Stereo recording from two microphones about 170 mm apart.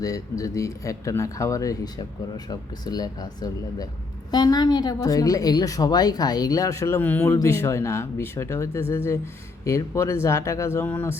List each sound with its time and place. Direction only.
0.0 s a woman's voice: 20° left (ahead or behind)